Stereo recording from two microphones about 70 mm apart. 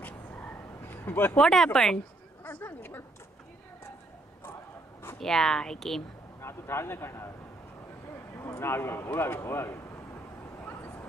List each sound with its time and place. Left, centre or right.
0.0 s a sound: left
1.3 s speech: centre
2.4 s a sound: left
5.2 s speech: centre
6.4 s speech: left
8.4 s speech: left